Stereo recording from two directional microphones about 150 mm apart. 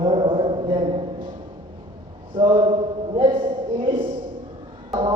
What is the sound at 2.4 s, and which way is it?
Speech, 30° right (ahead or behind).